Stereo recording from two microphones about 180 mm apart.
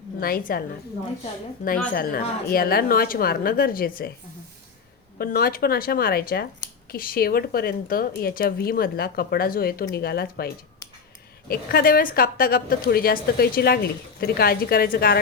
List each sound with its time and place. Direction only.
0.2 s a woman's voice: 55° left (ahead or behind)
5.1 s a woman's voice: 55° left (ahead or behind)